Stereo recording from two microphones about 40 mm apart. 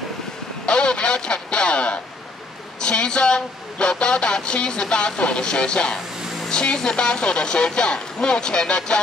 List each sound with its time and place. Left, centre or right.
0.7 s radio: left
2.8 s a woman's voice: left